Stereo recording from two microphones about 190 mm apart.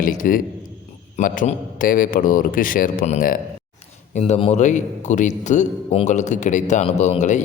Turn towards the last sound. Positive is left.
turn(degrees=40)  # may be behind; listen again after turning